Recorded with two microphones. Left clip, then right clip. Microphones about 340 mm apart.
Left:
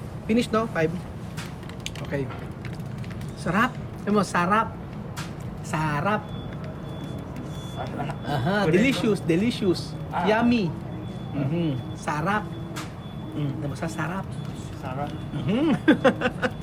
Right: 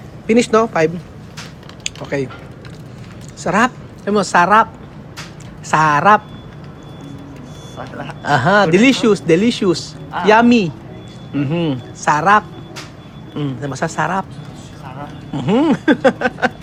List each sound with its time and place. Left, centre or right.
0.3 s speech: centre
2.0 s speech: centre
3.4 s a woman's voice: centre
5.7 s speech: centre
8.0 s speech: centre
13.4 s speech: centre
15.4 s speech: centre